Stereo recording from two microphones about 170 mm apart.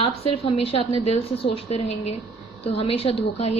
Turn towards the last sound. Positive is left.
turn(degrees=35)  # may be behind; listen again after turning